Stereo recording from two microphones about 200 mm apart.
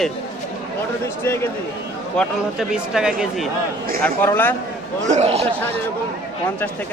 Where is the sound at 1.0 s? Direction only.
10° left (ahead or behind).